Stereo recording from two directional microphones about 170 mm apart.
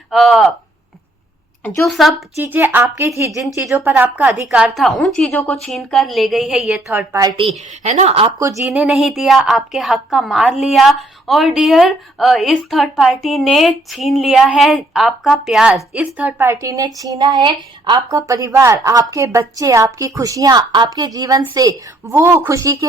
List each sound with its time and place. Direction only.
0.1 s a woman's voice: centre (ahead or behind)
1.6 s speech: 15° left (ahead or behind)
1.9 s a woman's voice: centre (ahead or behind)
2.4 s a woman's voice: 10° right (ahead or behind); by 8.3 s 40° right (ahead or behind)
8.4 s a woman's voice: 15° right (ahead or behind)